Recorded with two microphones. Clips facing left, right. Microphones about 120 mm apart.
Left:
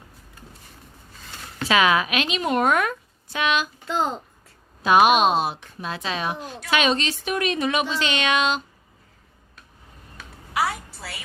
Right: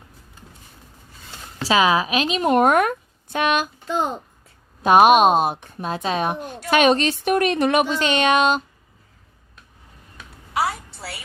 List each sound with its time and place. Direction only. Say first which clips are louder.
1.5 s a woman's voice: right 2 dB; 30° right (ahead or behind); by 3.7 s 50° right (ahead or behind)
3.8 s a child's voice: even; 15° right (ahead or behind)
4.8 s speech: right 4 dB; 50° right (ahead or behind)